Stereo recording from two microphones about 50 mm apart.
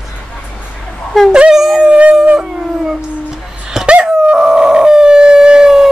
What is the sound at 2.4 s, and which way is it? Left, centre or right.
Howl, centre.